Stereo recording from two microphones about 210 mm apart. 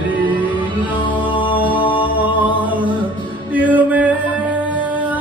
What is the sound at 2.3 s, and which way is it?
Music, 5° right (ahead or behind).